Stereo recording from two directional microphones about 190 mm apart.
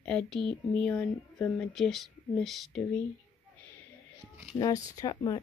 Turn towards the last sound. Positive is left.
turn(degrees=20)  # may be behind; listen again after turning